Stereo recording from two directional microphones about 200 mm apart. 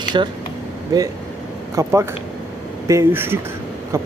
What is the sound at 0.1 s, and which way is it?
Speech, 25° right (ahead or behind).